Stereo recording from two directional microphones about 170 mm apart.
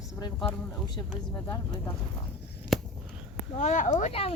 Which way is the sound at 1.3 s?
15° left (ahead or behind).